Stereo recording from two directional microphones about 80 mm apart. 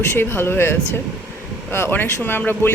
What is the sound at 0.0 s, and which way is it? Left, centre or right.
Speech, left.